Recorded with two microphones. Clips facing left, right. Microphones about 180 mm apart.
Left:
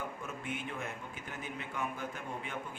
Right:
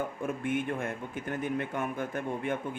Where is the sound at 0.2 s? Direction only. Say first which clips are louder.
Right 10 dB; 55° right (ahead or behind).